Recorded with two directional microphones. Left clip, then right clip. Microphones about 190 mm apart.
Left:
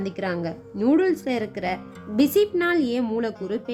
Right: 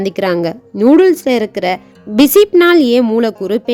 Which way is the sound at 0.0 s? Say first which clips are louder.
Right 13 dB; 55° right (ahead or behind).